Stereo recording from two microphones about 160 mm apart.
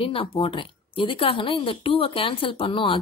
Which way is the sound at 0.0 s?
35° left (ahead or behind).